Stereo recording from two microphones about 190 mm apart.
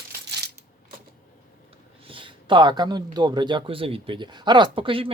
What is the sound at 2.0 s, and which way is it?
Speech, 25° right (ahead or behind).